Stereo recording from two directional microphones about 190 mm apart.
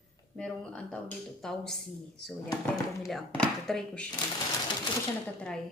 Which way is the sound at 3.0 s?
Centre (ahead or behind).